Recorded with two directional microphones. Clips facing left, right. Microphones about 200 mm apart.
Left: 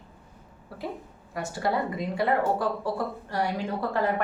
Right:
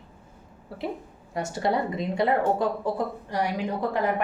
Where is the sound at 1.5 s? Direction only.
25° right (ahead or behind).